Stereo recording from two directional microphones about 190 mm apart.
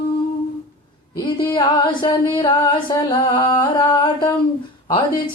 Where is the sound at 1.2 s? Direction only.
25° left (ahead or behind).